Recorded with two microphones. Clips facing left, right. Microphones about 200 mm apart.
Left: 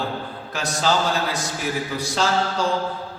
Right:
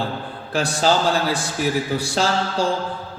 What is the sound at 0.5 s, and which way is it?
Speech, 30° right (ahead or behind).